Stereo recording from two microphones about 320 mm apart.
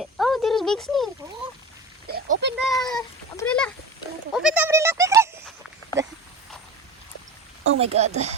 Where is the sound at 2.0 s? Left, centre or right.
Right.